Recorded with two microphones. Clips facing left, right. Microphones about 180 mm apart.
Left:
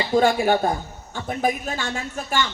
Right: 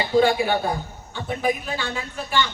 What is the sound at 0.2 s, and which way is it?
Speech, 45° left (ahead or behind).